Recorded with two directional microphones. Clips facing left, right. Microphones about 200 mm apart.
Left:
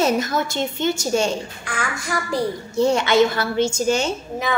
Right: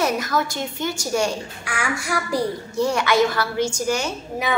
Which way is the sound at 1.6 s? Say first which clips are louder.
Right 1 dB; 10° right (ahead or behind).